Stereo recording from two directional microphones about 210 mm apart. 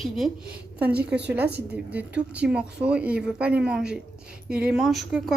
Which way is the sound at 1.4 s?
50° right (ahead or behind).